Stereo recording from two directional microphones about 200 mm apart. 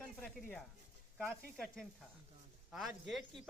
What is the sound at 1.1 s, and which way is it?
Speech, centre (ahead or behind).